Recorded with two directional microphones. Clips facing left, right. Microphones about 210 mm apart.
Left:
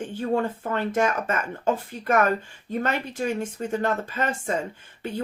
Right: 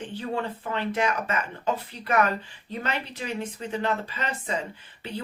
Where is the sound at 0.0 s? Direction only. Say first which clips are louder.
Left 5 dB; 45° left (ahead or behind).